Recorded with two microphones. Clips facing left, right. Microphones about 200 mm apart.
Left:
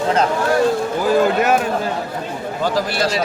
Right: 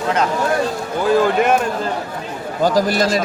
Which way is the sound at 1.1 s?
5° left (ahead or behind).